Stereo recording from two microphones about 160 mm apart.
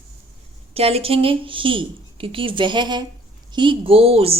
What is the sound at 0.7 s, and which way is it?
A woman's voice, 40° right (ahead or behind).